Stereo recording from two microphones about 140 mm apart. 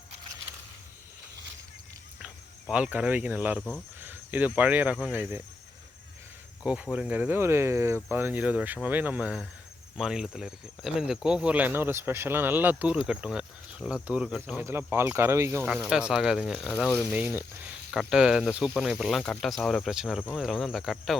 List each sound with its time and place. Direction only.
2.2 s speech: 10° right (ahead or behind)
3.6 s speech: 10° left (ahead or behind)
4.0 s speech: 15° right (ahead or behind)
6.9 s speech: 10° right (ahead or behind)
14.6 s speech: 15° right (ahead or behind)
15.7 s speech: 5° right (ahead or behind)